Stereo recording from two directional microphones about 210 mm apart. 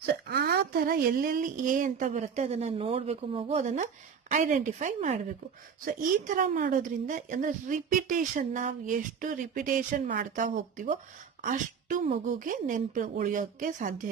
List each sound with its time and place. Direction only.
0.0 s a woman's voice: 50° right (ahead or behind)